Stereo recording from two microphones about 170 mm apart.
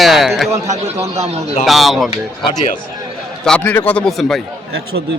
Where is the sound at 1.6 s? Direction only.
Centre (ahead or behind).